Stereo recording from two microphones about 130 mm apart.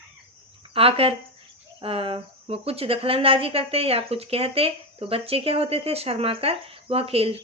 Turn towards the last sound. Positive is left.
turn(degrees=-50)  # may be behind; listen again after turning